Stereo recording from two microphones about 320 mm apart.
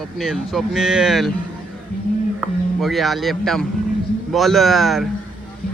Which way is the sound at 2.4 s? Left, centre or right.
Centre.